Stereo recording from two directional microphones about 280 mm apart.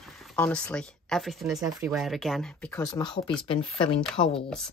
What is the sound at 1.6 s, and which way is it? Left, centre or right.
Speech, centre.